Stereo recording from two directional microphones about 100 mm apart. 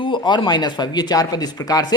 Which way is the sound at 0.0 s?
50° left (ahead or behind).